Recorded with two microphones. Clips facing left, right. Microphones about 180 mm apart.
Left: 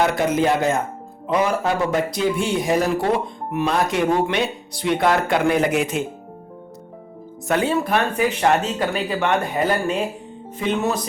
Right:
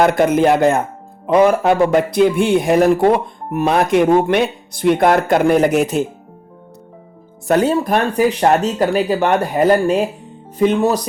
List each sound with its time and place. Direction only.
0.0 s speech: 55° right (ahead or behind); by 6.1 s 40° right (ahead or behind)
7.4 s speech: 40° right (ahead or behind)